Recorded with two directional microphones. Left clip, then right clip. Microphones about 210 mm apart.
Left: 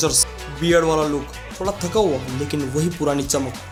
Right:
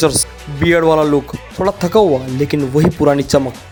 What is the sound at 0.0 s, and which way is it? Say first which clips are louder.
Speech: right 6 dB; 30° right (ahead or behind).